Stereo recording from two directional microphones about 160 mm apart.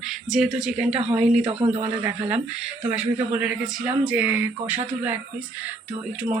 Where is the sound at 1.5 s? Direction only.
40° right (ahead or behind).